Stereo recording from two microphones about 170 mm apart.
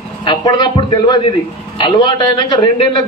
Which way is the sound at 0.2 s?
25° left (ahead or behind).